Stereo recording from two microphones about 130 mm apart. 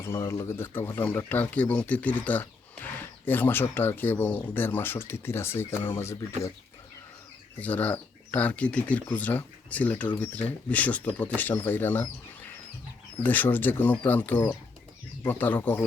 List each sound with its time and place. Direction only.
0.0 s speech: 20° left (ahead or behind)
7.6 s speech: 10° left (ahead or behind)